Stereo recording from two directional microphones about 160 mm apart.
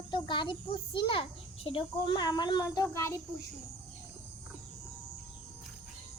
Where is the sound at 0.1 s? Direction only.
30° left (ahead or behind).